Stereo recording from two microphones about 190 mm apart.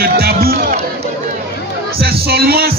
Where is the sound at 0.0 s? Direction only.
55° right (ahead or behind).